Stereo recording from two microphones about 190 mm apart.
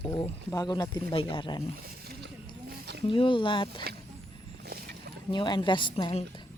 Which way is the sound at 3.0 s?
25° left (ahead or behind).